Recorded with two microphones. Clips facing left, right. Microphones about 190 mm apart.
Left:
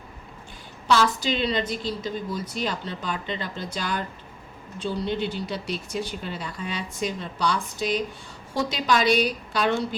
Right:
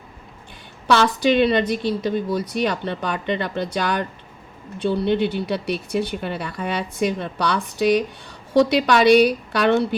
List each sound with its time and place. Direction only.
0.9 s speech: 65° right (ahead or behind)